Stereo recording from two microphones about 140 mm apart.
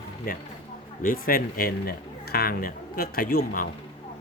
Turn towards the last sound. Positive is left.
turn(degrees=85)